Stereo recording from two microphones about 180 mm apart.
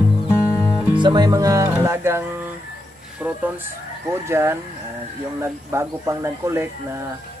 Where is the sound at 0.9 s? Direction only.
25° right (ahead or behind).